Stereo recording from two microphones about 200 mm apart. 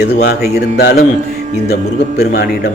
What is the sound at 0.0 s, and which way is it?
Speech, 55° left (ahead or behind).